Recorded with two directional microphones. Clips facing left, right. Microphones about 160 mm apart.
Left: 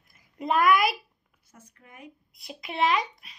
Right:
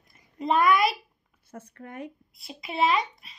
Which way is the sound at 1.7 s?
65° right (ahead or behind).